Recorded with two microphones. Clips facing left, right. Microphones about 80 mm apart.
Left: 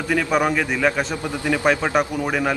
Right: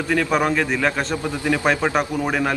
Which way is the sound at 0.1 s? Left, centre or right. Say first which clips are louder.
Even; centre.